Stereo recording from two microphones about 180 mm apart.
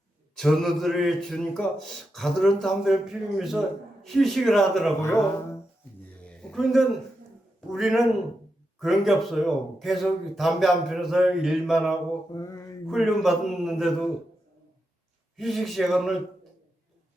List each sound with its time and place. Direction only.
0.3 s speech: centre (ahead or behind)
4.9 s speech: 15° left (ahead or behind)
6.2 s a sound: centre (ahead or behind)
7.7 s speech: centre (ahead or behind)
12.3 s mantra: 20° left (ahead or behind)
12.9 s speech: centre (ahead or behind)
15.4 s speech: centre (ahead or behind)